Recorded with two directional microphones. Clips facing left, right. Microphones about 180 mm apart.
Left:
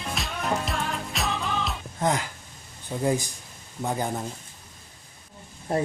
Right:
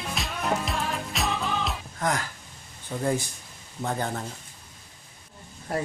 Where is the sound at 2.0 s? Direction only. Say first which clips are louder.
Left 3 dB; 20° left (ahead or behind).